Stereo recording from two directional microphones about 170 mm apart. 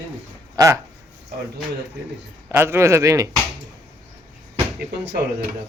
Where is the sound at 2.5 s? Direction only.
15° right (ahead or behind).